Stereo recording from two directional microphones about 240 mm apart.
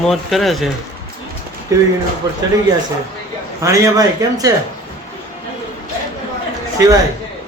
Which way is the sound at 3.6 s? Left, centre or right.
Centre.